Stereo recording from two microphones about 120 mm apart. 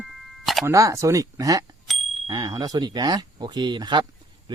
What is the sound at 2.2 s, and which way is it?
Speech, 35° right (ahead or behind).